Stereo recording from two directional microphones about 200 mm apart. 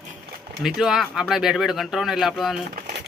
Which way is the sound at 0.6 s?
Centre (ahead or behind).